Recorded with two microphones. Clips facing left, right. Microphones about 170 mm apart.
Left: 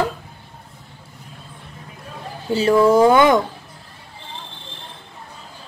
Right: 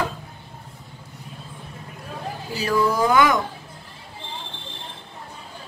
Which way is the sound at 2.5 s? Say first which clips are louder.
Left 8 dB; 25° left (ahead or behind).